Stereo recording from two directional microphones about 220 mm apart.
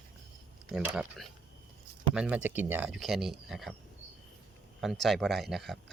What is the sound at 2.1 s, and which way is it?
Speech, 5° right (ahead or behind).